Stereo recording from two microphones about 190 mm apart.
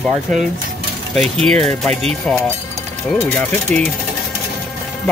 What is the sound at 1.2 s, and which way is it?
Speech, 30° right (ahead or behind).